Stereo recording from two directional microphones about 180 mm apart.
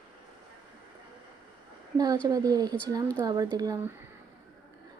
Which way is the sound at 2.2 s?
20° right (ahead or behind).